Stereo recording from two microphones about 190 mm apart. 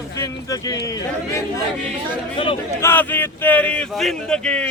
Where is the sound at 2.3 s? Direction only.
30° left (ahead or behind).